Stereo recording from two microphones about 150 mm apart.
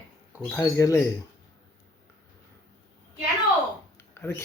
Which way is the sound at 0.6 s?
20° left (ahead or behind).